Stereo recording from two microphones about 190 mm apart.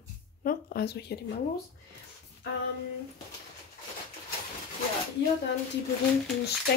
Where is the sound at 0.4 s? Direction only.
50° left (ahead or behind).